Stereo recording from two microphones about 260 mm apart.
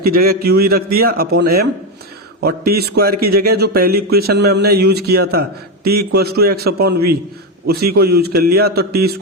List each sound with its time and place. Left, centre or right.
0.0 s a man's voice: right